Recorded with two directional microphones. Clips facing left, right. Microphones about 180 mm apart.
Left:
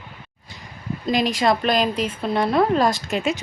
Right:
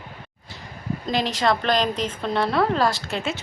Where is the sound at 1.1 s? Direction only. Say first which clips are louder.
Left 3 dB; 15° left (ahead or behind).